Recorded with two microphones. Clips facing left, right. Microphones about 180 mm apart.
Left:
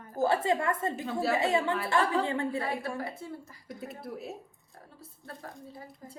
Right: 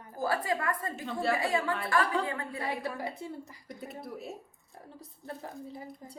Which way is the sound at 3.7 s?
Centre (ahead or behind).